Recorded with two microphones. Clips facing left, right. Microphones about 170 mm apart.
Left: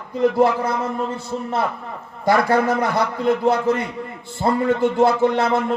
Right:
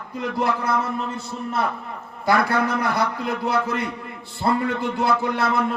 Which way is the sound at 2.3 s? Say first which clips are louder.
Left 4 dB; 45° left (ahead or behind).